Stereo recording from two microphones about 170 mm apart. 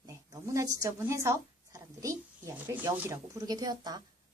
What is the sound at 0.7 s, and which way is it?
A woman's voice, 20° right (ahead or behind).